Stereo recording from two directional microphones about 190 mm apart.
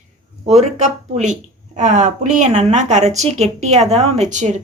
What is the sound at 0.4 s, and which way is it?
Speech, 35° right (ahead or behind).